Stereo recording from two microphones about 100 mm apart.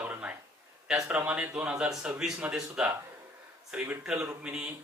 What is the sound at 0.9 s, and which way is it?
A man's voice, 10° right (ahead or behind).